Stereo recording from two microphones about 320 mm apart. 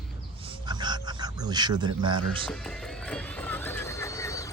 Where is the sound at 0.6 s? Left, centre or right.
Centre.